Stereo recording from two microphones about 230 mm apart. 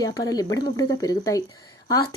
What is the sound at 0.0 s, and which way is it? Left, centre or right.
Speech, centre.